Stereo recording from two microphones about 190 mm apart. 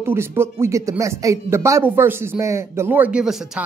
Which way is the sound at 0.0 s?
10° right (ahead or behind).